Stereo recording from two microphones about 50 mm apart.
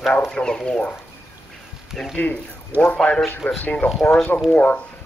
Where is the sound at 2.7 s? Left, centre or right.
Right.